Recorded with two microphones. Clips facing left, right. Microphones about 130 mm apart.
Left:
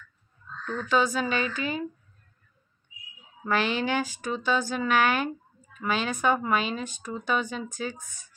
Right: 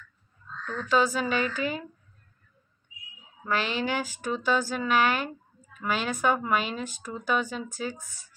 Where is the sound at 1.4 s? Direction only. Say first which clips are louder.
Right 1 dB; 20° left (ahead or behind).